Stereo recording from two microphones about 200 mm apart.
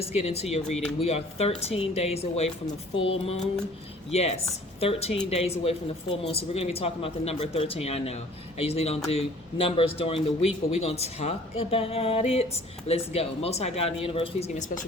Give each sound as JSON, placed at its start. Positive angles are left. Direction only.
{"t": 0.0, "sound": "speech", "side_deg": 30}
{"t": 3.0, "sound": "a sound", "side_deg": 30}
{"t": 4.1, "sound": "speech", "side_deg": 30}